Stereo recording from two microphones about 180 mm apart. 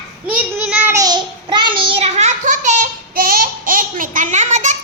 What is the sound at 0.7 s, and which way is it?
Child singing, 10° right (ahead or behind).